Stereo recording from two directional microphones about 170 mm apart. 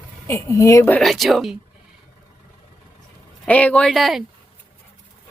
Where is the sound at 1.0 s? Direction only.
Centre (ahead or behind).